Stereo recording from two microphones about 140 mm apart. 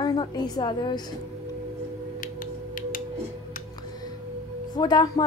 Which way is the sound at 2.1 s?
80° left.